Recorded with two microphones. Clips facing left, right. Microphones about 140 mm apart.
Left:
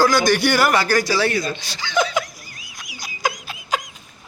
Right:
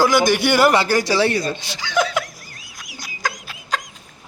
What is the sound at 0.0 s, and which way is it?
A man's voice, 20° right (ahead or behind).